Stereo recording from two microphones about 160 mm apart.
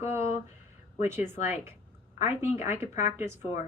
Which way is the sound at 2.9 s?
50° left (ahead or behind).